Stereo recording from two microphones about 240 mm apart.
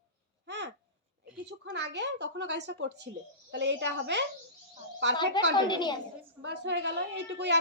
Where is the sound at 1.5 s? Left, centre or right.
Right.